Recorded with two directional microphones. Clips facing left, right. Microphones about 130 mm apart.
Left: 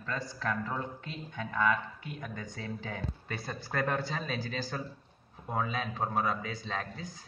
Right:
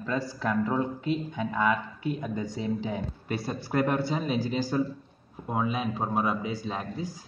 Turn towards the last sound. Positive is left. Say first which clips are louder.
# right 4 dB
turn(degrees=-15)  # may be behind; listen again after turning